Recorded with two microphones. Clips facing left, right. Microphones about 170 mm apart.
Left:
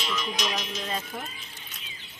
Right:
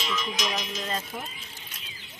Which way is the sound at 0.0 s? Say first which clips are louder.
Even; 5° left (ahead or behind).